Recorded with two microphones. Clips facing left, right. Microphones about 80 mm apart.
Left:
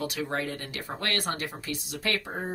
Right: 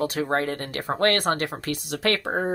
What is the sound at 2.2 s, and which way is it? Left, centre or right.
Speech, right.